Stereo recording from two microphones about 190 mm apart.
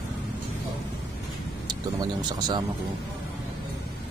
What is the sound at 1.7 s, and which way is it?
Speech, 20° right (ahead or behind).